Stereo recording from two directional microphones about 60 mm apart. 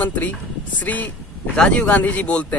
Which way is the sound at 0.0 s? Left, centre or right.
Left.